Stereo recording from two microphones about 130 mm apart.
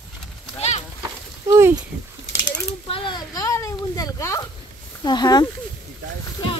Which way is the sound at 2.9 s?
35° left (ahead or behind).